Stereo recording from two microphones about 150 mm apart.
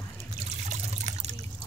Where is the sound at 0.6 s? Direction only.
50° right (ahead or behind).